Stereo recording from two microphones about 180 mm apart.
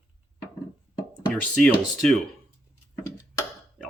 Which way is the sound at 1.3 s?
5° left (ahead or behind).